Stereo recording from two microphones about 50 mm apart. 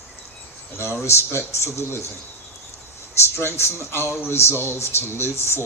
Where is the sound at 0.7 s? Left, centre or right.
Left.